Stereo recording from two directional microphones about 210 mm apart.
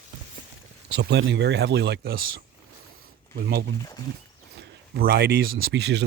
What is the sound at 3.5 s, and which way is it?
Speech, 55° right (ahead or behind).